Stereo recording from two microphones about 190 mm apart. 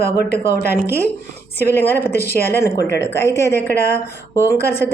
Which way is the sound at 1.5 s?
10° left (ahead or behind).